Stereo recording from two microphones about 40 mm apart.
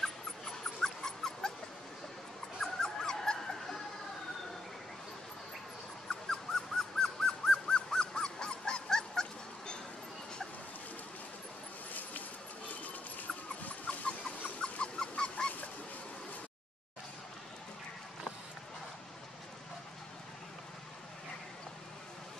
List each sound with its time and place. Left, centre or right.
0.0 s dog: centre
2.6 s dog: centre
6.0 s dog: centre
13.7 s a sound: left